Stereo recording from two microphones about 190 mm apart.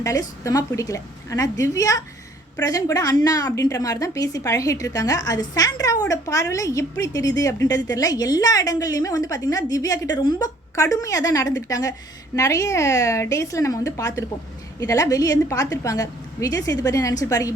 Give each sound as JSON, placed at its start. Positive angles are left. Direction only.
{"t": 0.0, "sound": "a woman's voice", "side_deg": 15}